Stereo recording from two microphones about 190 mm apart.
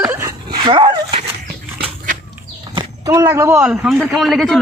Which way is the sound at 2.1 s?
45° right (ahead or behind).